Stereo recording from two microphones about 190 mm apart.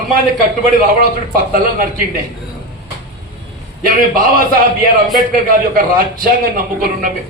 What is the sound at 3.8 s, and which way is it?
Speech, 45° right (ahead or behind).